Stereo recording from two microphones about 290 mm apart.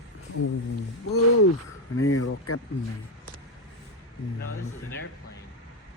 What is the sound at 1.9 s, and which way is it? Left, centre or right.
Speech, left.